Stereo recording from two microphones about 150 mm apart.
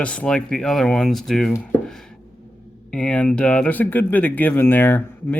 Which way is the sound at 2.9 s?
5° left (ahead or behind).